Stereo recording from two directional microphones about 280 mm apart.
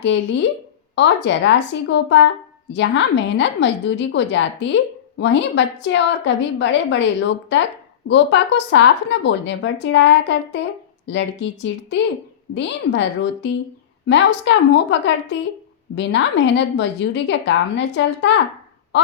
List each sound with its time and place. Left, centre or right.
0.0 s a woman's voice: left